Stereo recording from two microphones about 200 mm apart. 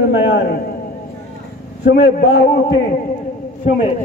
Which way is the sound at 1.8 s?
50° left (ahead or behind).